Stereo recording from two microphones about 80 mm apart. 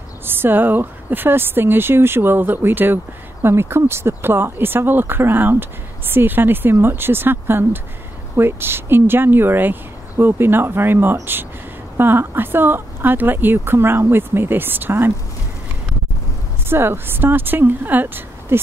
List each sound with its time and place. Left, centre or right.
0.2 s speech: right
16.6 s speech: right